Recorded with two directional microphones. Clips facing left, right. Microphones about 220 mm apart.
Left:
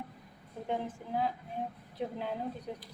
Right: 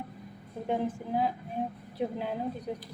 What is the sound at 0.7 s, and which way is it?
A woman's voice, 10° right (ahead or behind).